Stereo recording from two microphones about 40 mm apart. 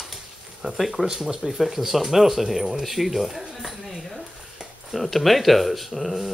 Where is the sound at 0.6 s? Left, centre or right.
Centre.